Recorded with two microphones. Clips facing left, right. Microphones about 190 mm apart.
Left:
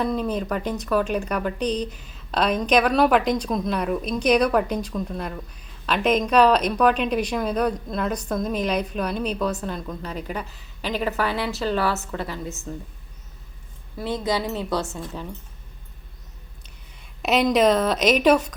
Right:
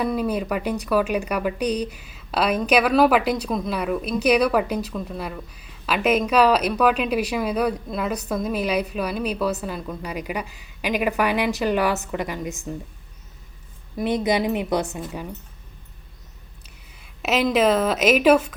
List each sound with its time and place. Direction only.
0.0 s speech: 10° right (ahead or behind)
13.9 s speech: 20° right (ahead or behind)
17.2 s a woman's voice: 5° right (ahead or behind)